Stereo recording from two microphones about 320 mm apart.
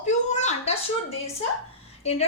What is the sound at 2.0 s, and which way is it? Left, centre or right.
Speech, centre.